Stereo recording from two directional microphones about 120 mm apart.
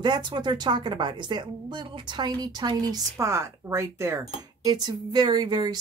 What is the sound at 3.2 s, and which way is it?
A woman's voice, 25° right (ahead or behind).